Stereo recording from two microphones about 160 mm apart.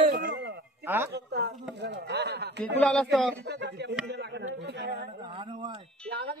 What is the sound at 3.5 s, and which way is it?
Speech, 90° right.